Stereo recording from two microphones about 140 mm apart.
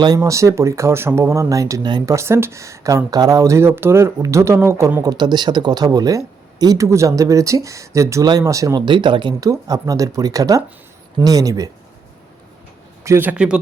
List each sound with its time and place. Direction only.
0.0 s speech: 25° right (ahead or behind)
5.1 s speech: 30° right (ahead or behind)
13.1 s a man's voice: 15° right (ahead or behind)